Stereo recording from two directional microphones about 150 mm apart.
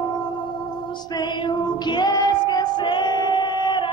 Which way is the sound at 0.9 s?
30° left (ahead or behind).